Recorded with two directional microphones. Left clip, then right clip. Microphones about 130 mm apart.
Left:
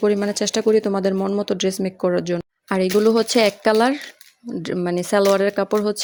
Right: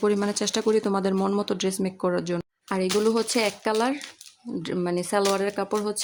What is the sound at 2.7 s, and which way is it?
Speech, 30° left (ahead or behind).